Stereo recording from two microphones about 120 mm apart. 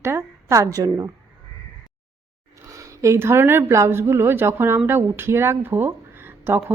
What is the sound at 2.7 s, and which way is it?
A woman's voice, 25° right (ahead or behind).